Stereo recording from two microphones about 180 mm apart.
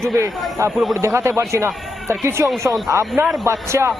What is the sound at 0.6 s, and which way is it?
A man's voice, 20° right (ahead or behind).